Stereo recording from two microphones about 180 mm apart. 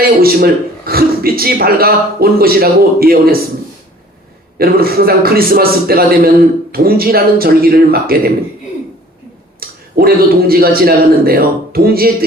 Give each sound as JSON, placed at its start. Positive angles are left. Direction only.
{"t": 0.2, "sound": "a man's voice", "side_deg": -55}
{"t": 4.5, "sound": "a man's voice", "side_deg": -55}
{"t": 9.6, "sound": "a man's voice", "side_deg": -55}